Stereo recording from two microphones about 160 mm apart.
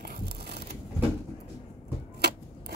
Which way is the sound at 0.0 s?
75° right (ahead or behind).